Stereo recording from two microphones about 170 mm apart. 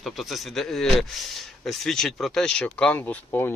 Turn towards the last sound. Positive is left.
turn(degrees=10)  # may be behind; listen again after turning